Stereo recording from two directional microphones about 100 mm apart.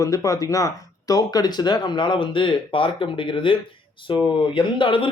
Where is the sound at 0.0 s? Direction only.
35° left (ahead or behind).